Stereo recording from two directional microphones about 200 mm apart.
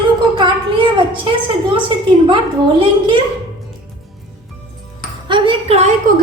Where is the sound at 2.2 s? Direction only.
25° right (ahead or behind).